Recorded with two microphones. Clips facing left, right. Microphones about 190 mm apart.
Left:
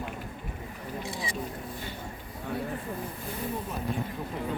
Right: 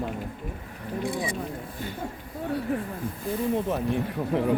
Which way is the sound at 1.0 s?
55° right (ahead or behind).